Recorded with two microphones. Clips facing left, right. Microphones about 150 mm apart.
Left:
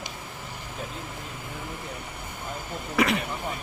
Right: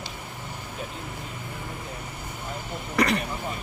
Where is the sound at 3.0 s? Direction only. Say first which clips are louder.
Even; centre (ahead or behind).